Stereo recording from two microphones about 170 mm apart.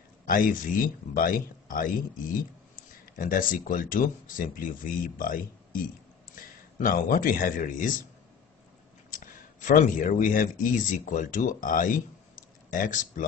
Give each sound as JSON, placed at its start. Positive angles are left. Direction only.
{"t": 0.3, "sound": "a man's voice", "side_deg": 55}
{"t": 9.1, "sound": "speech", "side_deg": 50}